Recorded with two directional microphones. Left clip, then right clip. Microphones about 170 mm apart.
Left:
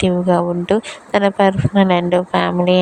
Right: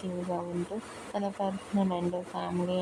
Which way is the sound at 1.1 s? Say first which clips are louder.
Left 19 dB; 60° left (ahead or behind).